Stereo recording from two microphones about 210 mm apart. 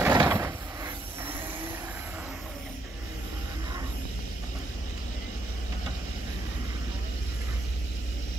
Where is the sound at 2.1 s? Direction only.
5° right (ahead or behind).